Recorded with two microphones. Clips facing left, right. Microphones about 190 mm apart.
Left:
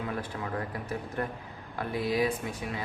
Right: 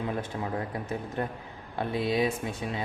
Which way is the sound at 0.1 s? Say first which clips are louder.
Right 2 dB; 25° right (ahead or behind).